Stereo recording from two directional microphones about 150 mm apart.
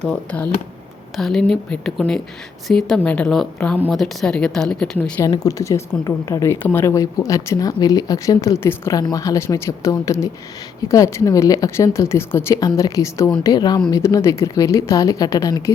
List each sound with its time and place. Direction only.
0.0 s speech: 5° left (ahead or behind)
5.2 s speech: 25° left (ahead or behind)